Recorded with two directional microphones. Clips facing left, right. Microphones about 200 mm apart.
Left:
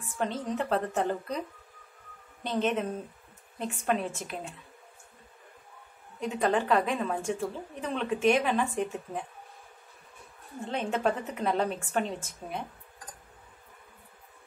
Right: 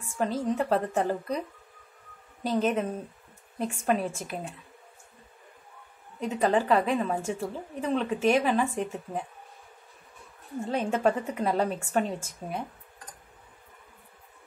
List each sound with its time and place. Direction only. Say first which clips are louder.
0.2 s a woman's voice: right 4 dB; 5° right (ahead or behind)
2.4 s a woman's voice: right 2 dB; 5° right (ahead or behind)
6.1 s a woman's voice: right 2 dB; 5° right (ahead or behind)
10.7 s a woman's voice: right 3 dB; 5° right (ahead or behind)